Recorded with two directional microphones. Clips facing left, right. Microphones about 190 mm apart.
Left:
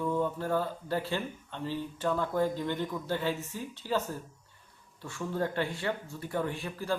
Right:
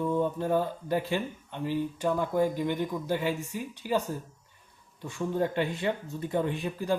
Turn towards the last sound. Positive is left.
turn(degrees=-20)  # may be behind; listen again after turning